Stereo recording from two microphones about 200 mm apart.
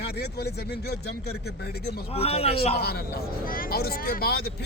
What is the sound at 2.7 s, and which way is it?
A man's voice, 50° left (ahead or behind).